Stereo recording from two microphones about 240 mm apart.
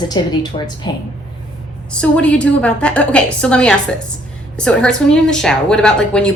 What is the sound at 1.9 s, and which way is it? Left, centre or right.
A woman's voice, centre.